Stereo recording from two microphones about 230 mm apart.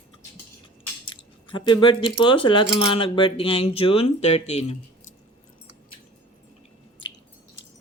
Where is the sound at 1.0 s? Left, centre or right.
Left.